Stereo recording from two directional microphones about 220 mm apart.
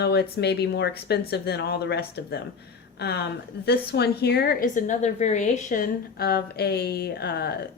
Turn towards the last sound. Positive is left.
turn(degrees=45)  # may be behind; listen again after turning